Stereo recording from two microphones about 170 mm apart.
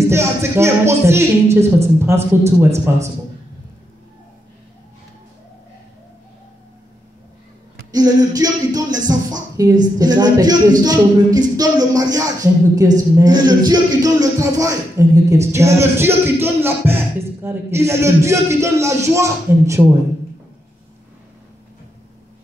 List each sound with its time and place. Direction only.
0.1 s speech: 15° right (ahead or behind)
7.9 s speech: 20° right (ahead or behind)